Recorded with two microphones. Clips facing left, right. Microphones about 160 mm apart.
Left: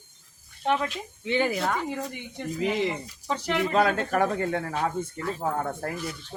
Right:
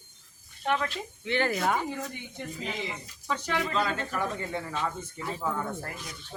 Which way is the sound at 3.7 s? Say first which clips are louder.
Left 7 dB; 60° left (ahead or behind).